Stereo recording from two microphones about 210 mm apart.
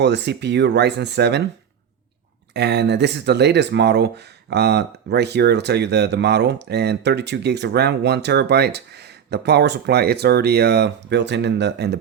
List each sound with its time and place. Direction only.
0.0 s speech: 55° right (ahead or behind)
2.5 s speech: 55° right (ahead or behind)